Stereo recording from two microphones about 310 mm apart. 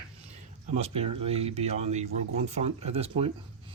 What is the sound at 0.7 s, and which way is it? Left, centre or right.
Speech, centre.